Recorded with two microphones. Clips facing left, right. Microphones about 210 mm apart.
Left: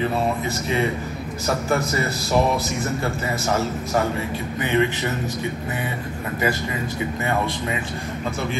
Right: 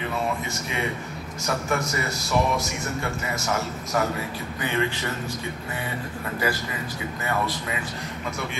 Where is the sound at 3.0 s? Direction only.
30° left (ahead or behind).